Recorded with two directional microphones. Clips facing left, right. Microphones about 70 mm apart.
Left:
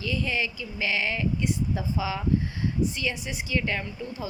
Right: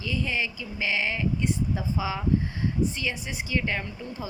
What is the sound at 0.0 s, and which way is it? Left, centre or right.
A woman's voice, centre.